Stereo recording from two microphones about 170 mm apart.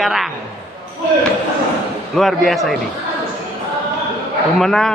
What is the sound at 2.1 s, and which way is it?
Speech, centre (ahead or behind).